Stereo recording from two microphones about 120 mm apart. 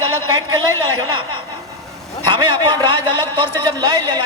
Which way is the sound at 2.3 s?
40° right (ahead or behind).